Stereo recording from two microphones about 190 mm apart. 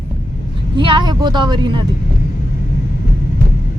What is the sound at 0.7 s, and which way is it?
Speech, 25° right (ahead or behind).